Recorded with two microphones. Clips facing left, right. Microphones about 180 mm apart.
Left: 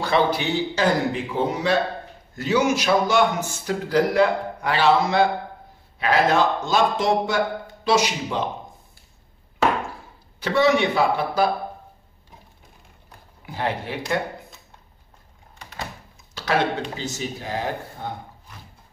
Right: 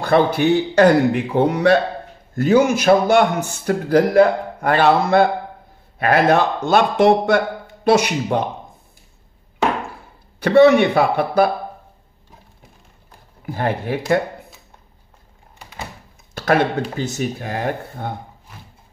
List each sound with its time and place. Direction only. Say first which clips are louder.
0.0 s a man's voice: right 5 dB; 50° right (ahead or behind)
2.3 s a man's voice: right 6 dB; 50° right (ahead or behind)
10.4 s a man's voice: right 8 dB; 60° right (ahead or behind)
13.5 s speech: right 5 dB; 50° right (ahead or behind)
16.3 s a sound: right 6 dB; 55° right (ahead or behind)
16.9 s a man's voice: right 6 dB; 55° right (ahead or behind)